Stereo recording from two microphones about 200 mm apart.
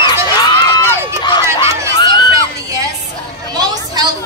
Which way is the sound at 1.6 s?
20° left (ahead or behind).